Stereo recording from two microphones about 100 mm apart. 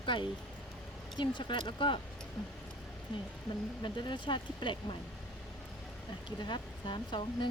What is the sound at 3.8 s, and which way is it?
Speech, 50° left (ahead or behind).